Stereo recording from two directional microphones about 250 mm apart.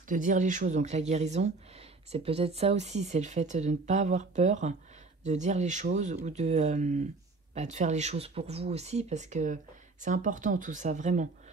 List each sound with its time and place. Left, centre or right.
0.1 s speech: right